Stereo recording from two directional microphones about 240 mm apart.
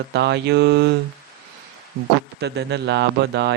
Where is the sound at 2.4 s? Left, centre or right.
Right.